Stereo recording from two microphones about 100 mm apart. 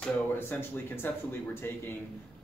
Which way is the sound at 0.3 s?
20° left (ahead or behind).